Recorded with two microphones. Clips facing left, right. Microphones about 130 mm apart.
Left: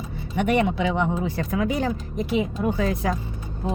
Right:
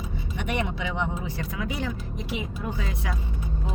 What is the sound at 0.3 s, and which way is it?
Speech, 50° left (ahead or behind).